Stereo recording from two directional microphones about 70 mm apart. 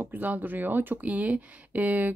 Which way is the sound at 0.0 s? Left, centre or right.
Right.